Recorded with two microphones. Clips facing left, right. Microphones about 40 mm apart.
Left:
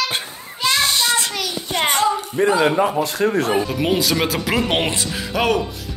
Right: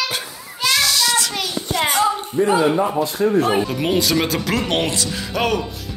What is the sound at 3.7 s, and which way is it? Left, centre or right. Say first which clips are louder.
Speech: even; centre.